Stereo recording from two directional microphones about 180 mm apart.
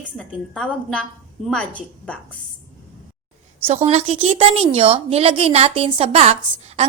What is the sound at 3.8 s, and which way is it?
A woman's voice, 35° right (ahead or behind).